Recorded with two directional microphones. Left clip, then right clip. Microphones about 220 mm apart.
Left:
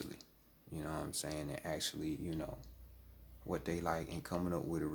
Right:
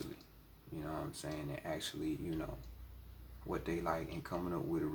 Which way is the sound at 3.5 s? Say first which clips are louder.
Even; 40° left (ahead or behind).